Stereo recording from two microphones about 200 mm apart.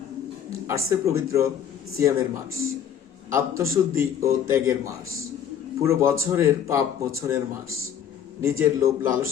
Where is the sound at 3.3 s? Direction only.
15° right (ahead or behind).